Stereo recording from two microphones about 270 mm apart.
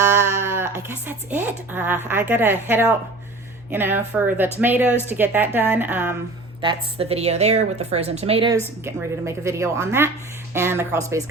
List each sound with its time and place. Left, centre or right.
0.0 s a sound: centre
0.4 s a woman's voice: centre
6.6 s a woman's voice: centre